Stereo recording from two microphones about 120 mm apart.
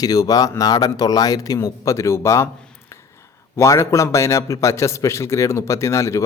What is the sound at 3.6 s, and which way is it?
Speech, 25° left (ahead or behind).